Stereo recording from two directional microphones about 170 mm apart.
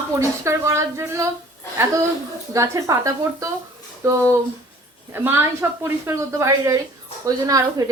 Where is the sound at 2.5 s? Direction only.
20° right (ahead or behind).